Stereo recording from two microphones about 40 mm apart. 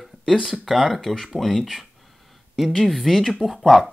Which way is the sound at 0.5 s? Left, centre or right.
Centre.